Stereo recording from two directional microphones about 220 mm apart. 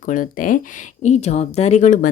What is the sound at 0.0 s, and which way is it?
Speech, 35° left (ahead or behind).